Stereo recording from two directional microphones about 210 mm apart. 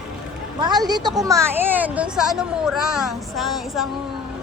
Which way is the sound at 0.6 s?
20° right (ahead or behind).